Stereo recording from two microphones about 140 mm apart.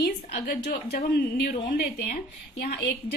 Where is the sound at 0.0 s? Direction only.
90° left.